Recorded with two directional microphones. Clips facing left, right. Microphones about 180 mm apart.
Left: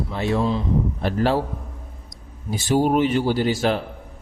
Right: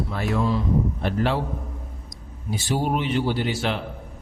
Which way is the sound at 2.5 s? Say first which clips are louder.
Left 6 dB; 45° left (ahead or behind).